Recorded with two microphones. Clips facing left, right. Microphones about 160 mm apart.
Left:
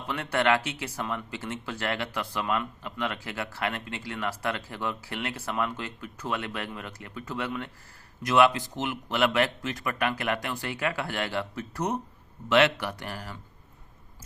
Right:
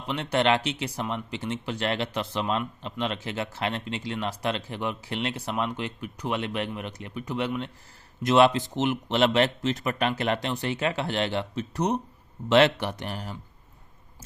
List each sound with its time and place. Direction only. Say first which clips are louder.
0.1 s speech: right 2 dB; 20° right (ahead or behind)